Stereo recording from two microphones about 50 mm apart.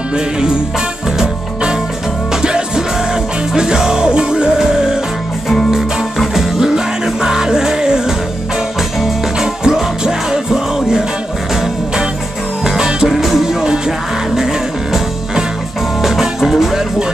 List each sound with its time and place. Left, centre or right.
1.2 s music: centre
9.4 s music: centre
12.6 s music: centre